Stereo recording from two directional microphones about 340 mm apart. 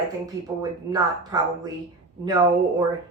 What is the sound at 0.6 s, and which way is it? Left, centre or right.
Speech, centre.